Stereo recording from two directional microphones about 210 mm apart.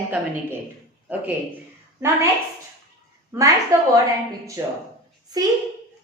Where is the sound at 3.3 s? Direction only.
10° right (ahead or behind).